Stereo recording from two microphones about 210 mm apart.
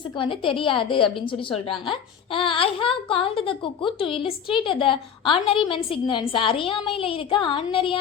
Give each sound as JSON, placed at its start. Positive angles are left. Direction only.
{"t": 0.2, "sound": "speech", "side_deg": 25}